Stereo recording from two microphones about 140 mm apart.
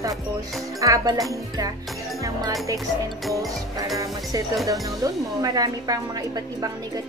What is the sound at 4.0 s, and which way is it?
Speech, 25° right (ahead or behind).